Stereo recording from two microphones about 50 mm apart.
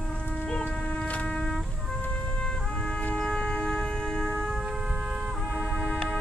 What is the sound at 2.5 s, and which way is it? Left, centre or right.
Trumpet, centre.